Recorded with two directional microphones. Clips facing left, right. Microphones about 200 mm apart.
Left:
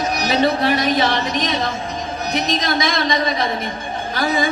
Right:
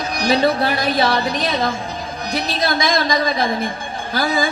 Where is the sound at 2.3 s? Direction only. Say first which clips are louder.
Even; 30° right (ahead or behind).